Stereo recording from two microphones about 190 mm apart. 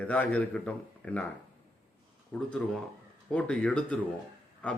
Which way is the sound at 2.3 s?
5° left (ahead or behind).